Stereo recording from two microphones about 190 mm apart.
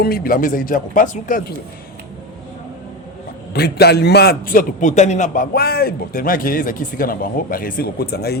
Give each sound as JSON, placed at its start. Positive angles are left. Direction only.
{"t": 0.0, "sound": "a man's voice", "side_deg": 50}
{"t": 3.5, "sound": "a man's voice", "side_deg": 55}